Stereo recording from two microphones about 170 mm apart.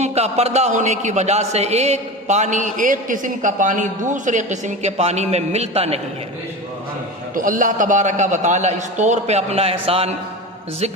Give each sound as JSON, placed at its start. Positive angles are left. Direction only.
{"t": 0.0, "sound": "a man's voice", "side_deg": -40}
{"t": 7.3, "sound": "a man's voice", "side_deg": -50}